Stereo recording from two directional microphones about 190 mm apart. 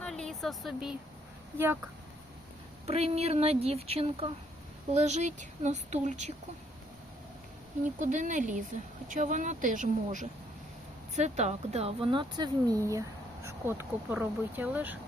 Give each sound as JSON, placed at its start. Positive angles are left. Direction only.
{"t": 0.0, "sound": "vehicle", "side_deg": 0}
{"t": 1.5, "sound": "a woman's voice", "side_deg": -15}
{"t": 2.8, "sound": "speech", "side_deg": -35}
{"t": 7.9, "sound": "a woman's voice", "side_deg": -40}